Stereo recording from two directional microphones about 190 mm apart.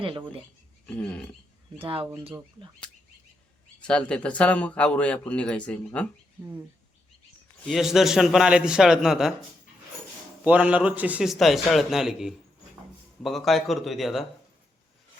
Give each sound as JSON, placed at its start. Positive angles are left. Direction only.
{"t": 0.0, "sound": "speech", "side_deg": -25}
{"t": 0.9, "sound": "speech", "side_deg": 5}
{"t": 1.8, "sound": "speech", "side_deg": -30}
{"t": 3.8, "sound": "speech", "side_deg": 5}
{"t": 7.6, "sound": "a man's voice", "side_deg": 0}
{"t": 10.4, "sound": "a man's voice", "side_deg": -5}